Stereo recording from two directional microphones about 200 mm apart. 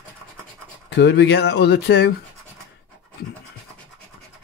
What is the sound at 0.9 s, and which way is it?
Speech, 60° left (ahead or behind).